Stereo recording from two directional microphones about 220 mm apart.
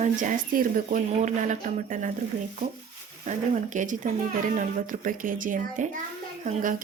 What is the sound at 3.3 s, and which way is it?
Speech, 35° right (ahead or behind).